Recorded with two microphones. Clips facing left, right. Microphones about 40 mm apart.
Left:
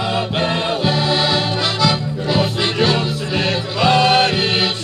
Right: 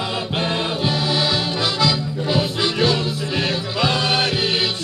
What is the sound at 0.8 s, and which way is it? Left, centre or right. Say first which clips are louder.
Accordion: left 3 dB; left.